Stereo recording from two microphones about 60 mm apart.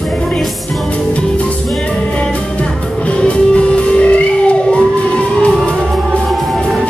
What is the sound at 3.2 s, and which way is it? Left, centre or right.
Music, centre.